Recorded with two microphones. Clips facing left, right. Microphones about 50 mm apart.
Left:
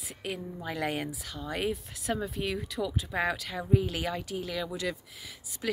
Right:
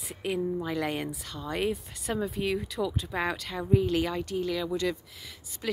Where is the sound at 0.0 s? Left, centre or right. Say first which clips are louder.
Right 7 dB; centre.